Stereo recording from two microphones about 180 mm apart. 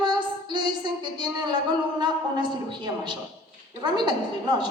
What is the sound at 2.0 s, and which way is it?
A woman's voice, 25° right (ahead or behind).